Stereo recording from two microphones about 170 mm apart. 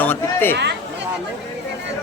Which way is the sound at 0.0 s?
10° left (ahead or behind).